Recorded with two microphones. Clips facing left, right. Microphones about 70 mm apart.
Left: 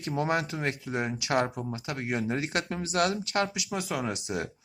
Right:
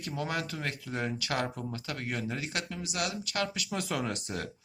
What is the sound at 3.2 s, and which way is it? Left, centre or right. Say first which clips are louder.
Speech: left 5 dB; left.